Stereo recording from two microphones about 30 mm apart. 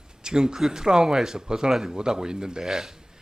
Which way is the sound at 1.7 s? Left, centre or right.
Centre.